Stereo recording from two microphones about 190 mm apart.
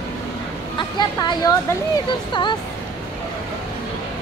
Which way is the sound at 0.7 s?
25° left (ahead or behind).